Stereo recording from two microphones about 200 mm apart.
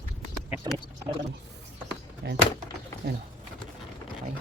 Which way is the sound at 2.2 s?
55° right (ahead or behind).